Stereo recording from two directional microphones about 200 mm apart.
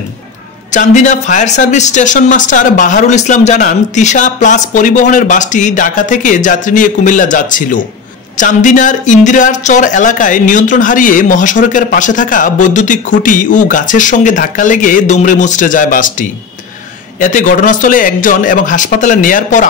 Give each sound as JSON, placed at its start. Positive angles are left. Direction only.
{"t": 0.7, "sound": "speech", "side_deg": 35}